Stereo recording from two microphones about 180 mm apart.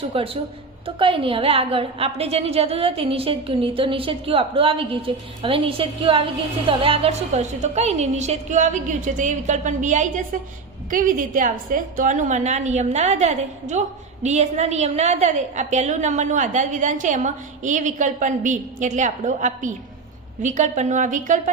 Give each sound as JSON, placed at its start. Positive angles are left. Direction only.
{"t": 0.1, "sound": "a woman's voice", "side_deg": -30}